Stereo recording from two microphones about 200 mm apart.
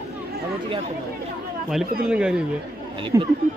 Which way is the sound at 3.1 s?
15° right (ahead or behind).